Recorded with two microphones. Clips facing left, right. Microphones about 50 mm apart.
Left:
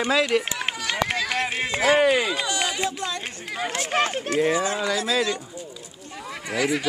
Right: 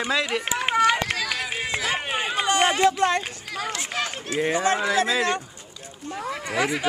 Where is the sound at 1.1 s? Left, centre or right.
Centre.